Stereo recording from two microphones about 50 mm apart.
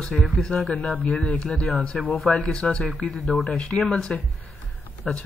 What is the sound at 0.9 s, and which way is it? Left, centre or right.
Speech, left.